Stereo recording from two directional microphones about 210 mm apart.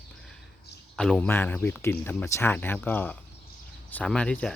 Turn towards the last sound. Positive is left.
turn(degrees=5)  # may be behind; listen again after turning